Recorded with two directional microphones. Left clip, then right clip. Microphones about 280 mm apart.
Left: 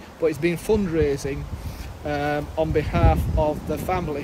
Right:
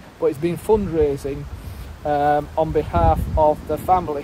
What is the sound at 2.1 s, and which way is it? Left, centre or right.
Speech, centre.